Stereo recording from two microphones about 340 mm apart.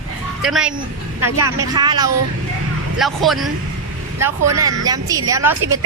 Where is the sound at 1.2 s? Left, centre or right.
Right.